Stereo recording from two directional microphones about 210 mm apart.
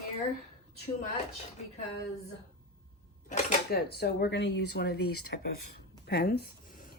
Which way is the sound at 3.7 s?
50° left (ahead or behind).